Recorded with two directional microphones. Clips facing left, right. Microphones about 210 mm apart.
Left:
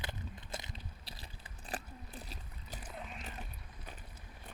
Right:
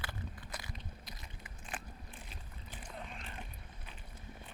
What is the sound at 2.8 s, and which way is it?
Vehicle, 5° left (ahead or behind).